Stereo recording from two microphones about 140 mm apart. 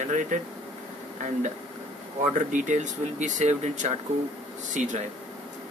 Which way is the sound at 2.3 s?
60° right (ahead or behind).